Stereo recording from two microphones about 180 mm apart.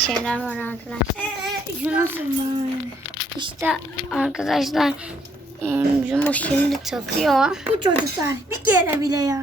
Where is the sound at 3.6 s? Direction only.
10° right (ahead or behind).